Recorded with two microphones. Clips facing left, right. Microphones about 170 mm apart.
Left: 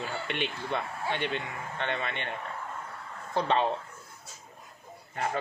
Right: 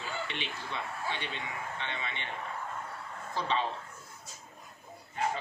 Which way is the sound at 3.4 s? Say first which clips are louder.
Left 5 dB; 55° left (ahead or behind).